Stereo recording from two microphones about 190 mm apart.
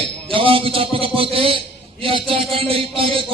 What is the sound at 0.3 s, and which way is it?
Speech, 30° right (ahead or behind).